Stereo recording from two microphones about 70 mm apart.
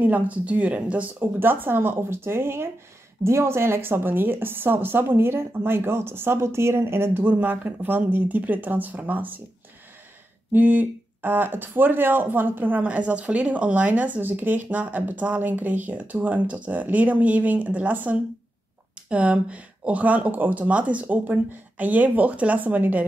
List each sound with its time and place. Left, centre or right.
0.0 s speech: right
10.5 s speech: right